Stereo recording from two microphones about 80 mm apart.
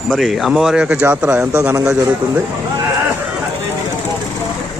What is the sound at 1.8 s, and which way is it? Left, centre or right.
Speech, right.